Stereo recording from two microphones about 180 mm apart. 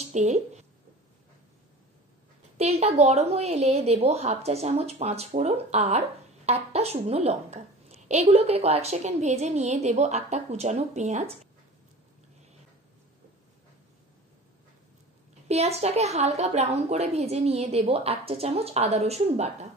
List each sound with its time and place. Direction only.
0.0 s a woman's voice: 40° right (ahead or behind)
2.5 s a woman's voice: 35° right (ahead or behind)
15.4 s a woman's voice: 35° right (ahead or behind)